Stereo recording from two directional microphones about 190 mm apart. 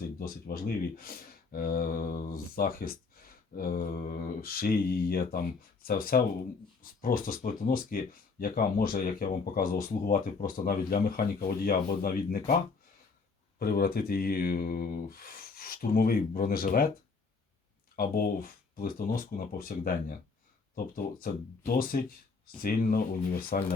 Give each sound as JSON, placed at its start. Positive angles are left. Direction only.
{"t": 0.2, "sound": "speech", "side_deg": 50}
{"t": 13.6, "sound": "speech", "side_deg": 50}
{"t": 17.9, "sound": "speech", "side_deg": 50}